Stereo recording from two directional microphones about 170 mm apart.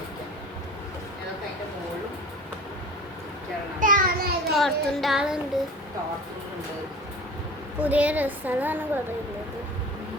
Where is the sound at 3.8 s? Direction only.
55° right (ahead or behind).